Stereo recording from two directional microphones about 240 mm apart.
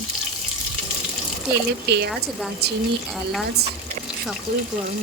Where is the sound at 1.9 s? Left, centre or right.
Right.